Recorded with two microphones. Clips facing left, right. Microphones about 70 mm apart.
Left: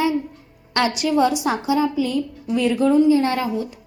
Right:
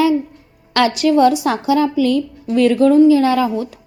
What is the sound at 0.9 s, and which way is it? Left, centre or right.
A woman's voice, right.